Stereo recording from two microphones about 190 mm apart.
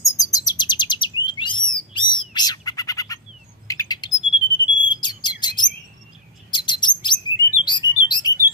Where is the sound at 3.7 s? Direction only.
20° left (ahead or behind).